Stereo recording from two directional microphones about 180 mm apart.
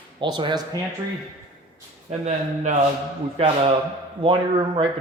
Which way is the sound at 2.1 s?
40° right (ahead or behind).